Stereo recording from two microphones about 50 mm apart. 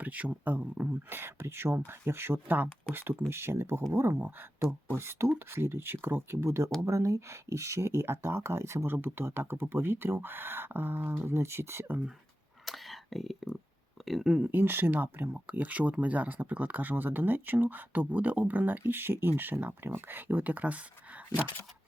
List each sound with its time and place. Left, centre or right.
0.0 s speech: right
1.1 s speech: right
6.4 s speech: right
6.8 s speech: right
8.4 s speech: right
8.9 s speech: right
12.6 s a sound: centre
14.0 s speech: centre
14.6 s speech: right